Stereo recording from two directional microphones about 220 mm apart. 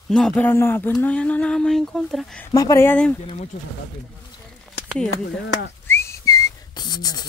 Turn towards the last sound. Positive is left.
turn(degrees=20)  # may be behind; listen again after turning